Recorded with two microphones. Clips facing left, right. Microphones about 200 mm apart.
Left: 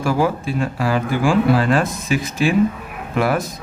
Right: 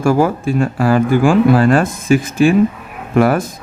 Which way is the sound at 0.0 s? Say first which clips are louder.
Right 5 dB; 50° right (ahead or behind).